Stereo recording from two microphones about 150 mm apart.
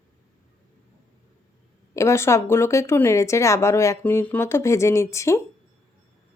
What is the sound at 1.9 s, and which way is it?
Speech, 20° left (ahead or behind).